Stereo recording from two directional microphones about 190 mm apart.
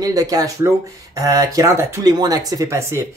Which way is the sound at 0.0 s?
20° right (ahead or behind).